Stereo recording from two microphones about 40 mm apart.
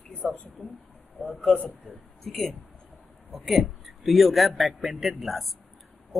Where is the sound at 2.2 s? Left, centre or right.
Centre.